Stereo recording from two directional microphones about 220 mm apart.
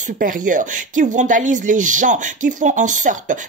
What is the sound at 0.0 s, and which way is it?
Speech, 35° right (ahead or behind).